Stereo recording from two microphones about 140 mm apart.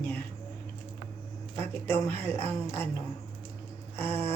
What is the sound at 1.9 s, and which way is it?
Speech, 15° left (ahead or behind).